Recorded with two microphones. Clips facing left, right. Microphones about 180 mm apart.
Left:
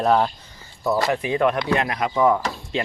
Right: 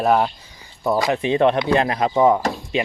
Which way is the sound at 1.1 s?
25° right (ahead or behind).